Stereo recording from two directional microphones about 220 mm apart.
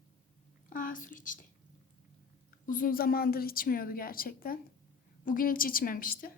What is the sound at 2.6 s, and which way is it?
A woman's voice, 40° left (ahead or behind).